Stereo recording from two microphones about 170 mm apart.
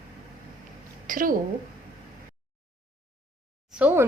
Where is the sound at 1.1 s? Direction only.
55° right (ahead or behind).